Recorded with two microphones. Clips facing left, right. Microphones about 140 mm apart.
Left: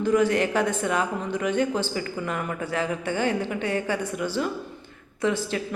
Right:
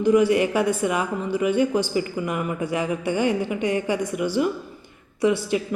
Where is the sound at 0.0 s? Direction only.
10° right (ahead or behind).